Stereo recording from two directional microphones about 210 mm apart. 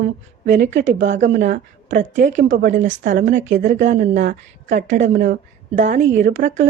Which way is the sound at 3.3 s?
60° right (ahead or behind).